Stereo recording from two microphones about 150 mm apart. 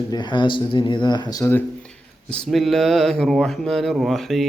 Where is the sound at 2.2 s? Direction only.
Centre (ahead or behind).